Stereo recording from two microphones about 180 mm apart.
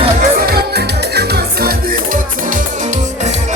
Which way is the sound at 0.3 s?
60° right (ahead or behind).